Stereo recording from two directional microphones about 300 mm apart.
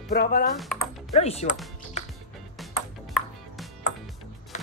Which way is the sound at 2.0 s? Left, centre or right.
Left.